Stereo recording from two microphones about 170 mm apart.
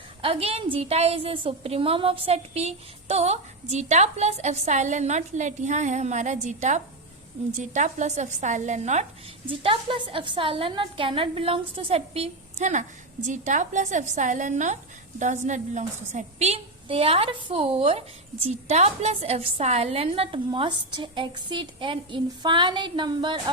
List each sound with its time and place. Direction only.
0.2 s a woman's voice: 35° right (ahead or behind)
9.5 s a woman's voice: 30° right (ahead or behind)